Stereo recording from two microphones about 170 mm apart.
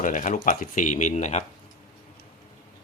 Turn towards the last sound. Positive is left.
turn(degrees=45)  # may be behind; listen again after turning